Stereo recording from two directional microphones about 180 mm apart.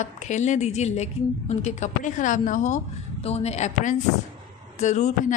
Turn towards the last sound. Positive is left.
turn(degrees=40)  # may be behind; listen again after turning